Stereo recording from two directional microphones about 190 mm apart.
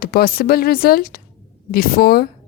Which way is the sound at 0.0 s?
50° left (ahead or behind).